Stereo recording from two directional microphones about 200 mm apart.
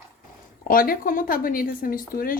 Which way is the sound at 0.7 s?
45° left (ahead or behind).